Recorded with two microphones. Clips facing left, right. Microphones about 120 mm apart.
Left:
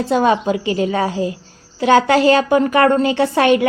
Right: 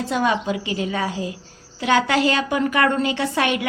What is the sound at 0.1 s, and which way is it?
A woman's voice, 35° left (ahead or behind).